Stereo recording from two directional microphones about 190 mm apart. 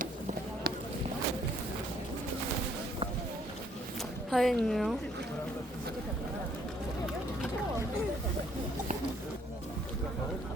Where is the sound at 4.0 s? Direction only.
Centre (ahead or behind).